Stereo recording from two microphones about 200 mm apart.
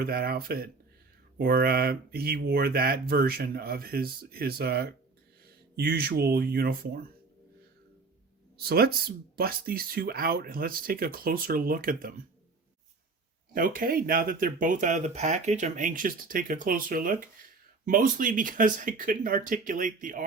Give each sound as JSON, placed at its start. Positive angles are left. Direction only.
{"t": 0.0, "sound": "speech", "side_deg": -50}
{"t": 8.5, "sound": "speech", "side_deg": -50}
{"t": 13.5, "sound": "speech", "side_deg": -45}